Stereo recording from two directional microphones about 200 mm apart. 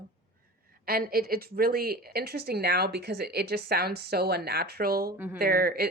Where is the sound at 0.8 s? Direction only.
50° right (ahead or behind).